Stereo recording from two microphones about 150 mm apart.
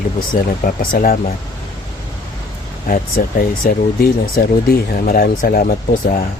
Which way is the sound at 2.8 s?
70° left (ahead or behind).